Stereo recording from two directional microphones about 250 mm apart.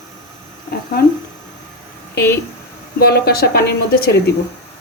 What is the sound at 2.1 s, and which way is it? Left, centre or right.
A woman's voice, left.